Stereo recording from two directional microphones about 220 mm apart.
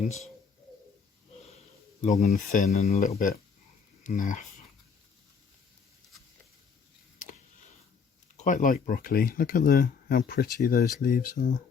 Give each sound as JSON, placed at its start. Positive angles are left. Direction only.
{"t": 2.0, "sound": "speech", "side_deg": 30}
{"t": 8.4, "sound": "speech", "side_deg": 35}